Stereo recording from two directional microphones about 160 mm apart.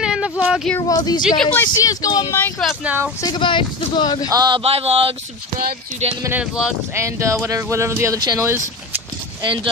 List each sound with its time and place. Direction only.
0.0 s speech: 5° right (ahead or behind)
0.7 s speech: 25° left (ahead or behind)
1.4 s speech: 10° left (ahead or behind)
2.6 s speech: 10° right (ahead or behind)
3.2 s speech: 25° left (ahead or behind)
4.3 s a man's voice: 25° right (ahead or behind)
6.2 s speech: 15° right (ahead or behind)